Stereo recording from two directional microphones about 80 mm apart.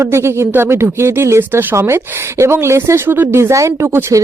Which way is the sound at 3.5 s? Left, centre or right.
Right.